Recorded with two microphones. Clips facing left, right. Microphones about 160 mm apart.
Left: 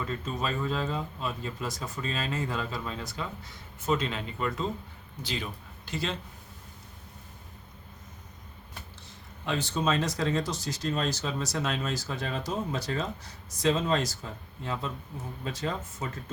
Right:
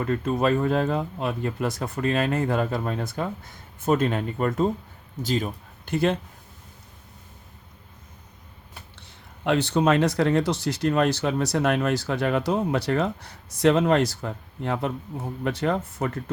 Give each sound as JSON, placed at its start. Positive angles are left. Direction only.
{"t": 0.0, "sound": "speech", "side_deg": -60}
{"t": 9.0, "sound": "speech", "side_deg": -65}